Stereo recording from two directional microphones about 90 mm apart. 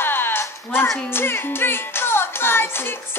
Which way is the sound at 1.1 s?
25° left (ahead or behind).